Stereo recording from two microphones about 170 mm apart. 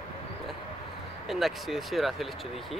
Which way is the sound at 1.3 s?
Centre (ahead or behind).